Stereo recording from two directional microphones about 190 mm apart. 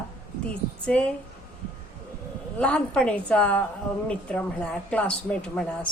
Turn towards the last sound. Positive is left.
turn(degrees=5)  # may be behind; listen again after turning